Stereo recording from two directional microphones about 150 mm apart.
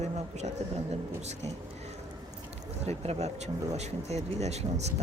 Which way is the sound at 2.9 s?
45° right (ahead or behind).